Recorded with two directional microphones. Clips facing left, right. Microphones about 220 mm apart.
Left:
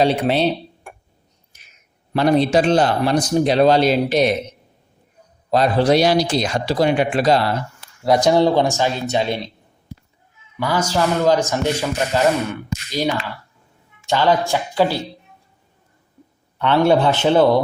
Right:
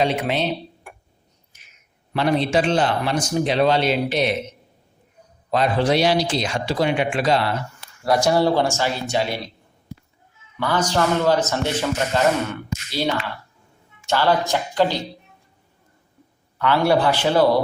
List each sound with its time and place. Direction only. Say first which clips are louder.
0.0 s speech: left 5 dB; 35° left (ahead or behind)
1.5 s a sound: left 2 dB; 35° left (ahead or behind)
2.1 s speech: left 4 dB; 40° left (ahead or behind)
5.5 s speech: left 4 dB; 35° left (ahead or behind)
8.0 s speech: left 3 dB; 20° left (ahead or behind)
10.6 s a man's voice: left 1 dB; 10° left (ahead or behind)
14.1 s a man's voice: left 2 dB; 15° left (ahead or behind)
16.6 s speech: left 3 dB; 25° left (ahead or behind)